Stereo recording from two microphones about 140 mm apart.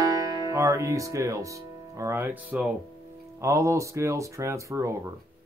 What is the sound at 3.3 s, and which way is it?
Speech, 20° right (ahead or behind).